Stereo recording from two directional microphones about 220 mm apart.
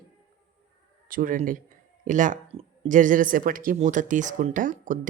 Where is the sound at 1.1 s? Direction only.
40° right (ahead or behind).